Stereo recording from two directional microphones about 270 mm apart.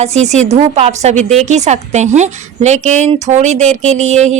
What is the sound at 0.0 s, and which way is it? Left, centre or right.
A woman's voice, right.